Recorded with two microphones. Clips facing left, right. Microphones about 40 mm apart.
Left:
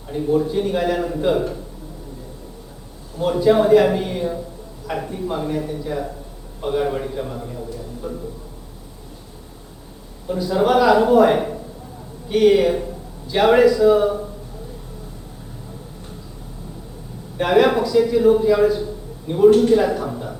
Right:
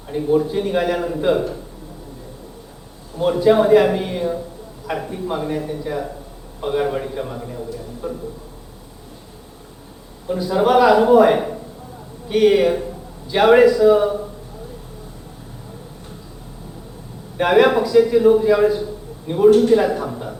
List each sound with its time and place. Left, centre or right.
0.1 s a man's voice: centre
3.4 s a man's voice: centre
10.2 s a man's voice: centre
17.3 s a man's voice: centre